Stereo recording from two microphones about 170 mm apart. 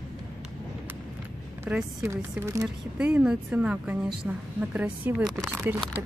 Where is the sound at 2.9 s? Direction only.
5° right (ahead or behind).